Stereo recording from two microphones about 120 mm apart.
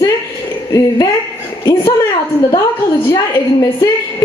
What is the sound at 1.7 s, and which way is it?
Speech, 30° left (ahead or behind).